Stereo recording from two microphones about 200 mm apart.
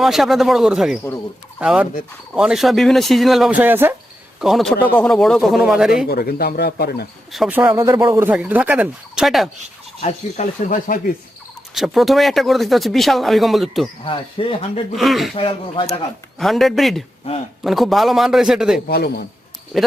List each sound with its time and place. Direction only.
0.0 s speech: centre (ahead or behind)
6.1 s speech: 50° left (ahead or behind)
7.3 s speech: 5° right (ahead or behind)
10.0 s speech: 35° left (ahead or behind)
11.7 s speech: centre (ahead or behind)
14.0 s speech: 25° left (ahead or behind)
14.9 s speech: centre (ahead or behind)
15.4 s speech: 25° left (ahead or behind)
16.4 s speech: centre (ahead or behind)
18.9 s speech: 50° left (ahead or behind)
19.7 s speech: centre (ahead or behind)